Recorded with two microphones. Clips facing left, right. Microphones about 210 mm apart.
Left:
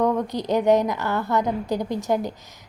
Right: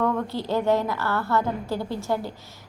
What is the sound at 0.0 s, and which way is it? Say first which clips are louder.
A woman's voice: left 3 dB; 15° left (ahead or behind).